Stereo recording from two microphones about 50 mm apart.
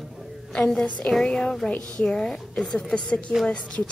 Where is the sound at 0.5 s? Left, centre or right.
Centre.